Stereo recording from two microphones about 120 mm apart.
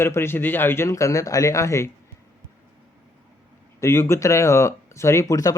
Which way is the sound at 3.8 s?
20° left (ahead or behind).